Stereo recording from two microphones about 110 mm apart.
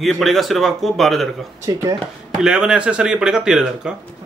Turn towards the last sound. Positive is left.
turn(degrees=-5)  # may be behind; listen again after turning